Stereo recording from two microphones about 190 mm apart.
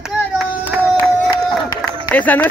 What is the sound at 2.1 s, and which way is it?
Speech, 10° left (ahead or behind).